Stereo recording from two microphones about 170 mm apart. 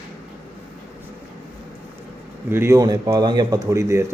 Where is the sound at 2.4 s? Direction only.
15° right (ahead or behind).